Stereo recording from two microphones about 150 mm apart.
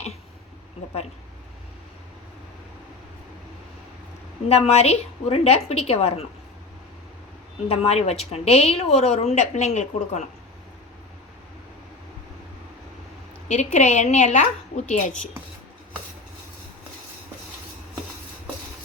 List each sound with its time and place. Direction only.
4.4 s a woman's voice: 45° left (ahead or behind)
7.7 s a woman's voice: 40° left (ahead or behind)
13.5 s a woman's voice: 50° left (ahead or behind)